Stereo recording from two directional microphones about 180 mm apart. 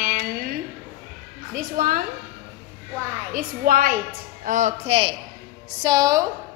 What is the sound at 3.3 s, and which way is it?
Speech, 50° right (ahead or behind).